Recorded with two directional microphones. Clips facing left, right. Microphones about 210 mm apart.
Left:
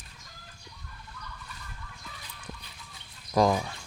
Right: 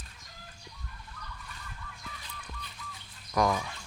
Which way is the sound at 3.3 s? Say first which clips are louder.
Left 4 dB; 30° left (ahead or behind).